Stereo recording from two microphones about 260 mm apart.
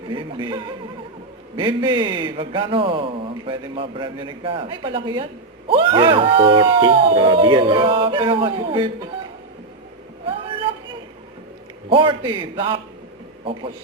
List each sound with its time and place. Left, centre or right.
0.1 s a man's voice: centre
10.2 s a sound: right
11.9 s a man's voice: centre